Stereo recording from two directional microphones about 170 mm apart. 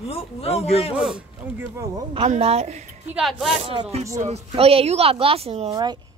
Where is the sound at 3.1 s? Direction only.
Centre (ahead or behind).